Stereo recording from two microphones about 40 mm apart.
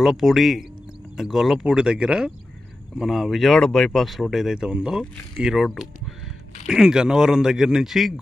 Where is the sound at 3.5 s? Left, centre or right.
Centre.